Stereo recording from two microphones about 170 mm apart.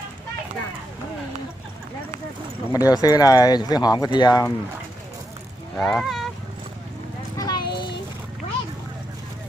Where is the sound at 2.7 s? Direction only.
20° left (ahead or behind).